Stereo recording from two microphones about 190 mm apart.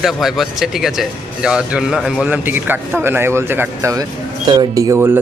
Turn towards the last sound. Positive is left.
turn(degrees=-10)  # may be behind; listen again after turning